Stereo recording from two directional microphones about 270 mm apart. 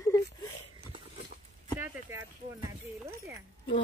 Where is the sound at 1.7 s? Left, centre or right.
Centre.